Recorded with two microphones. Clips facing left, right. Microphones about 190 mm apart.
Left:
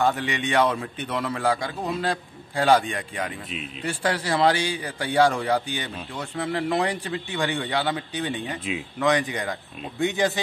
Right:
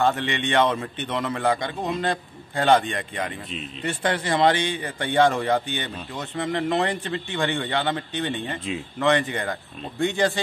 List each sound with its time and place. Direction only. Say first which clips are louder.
0.0 s a man's voice: right 1 dB; 5° left (ahead or behind)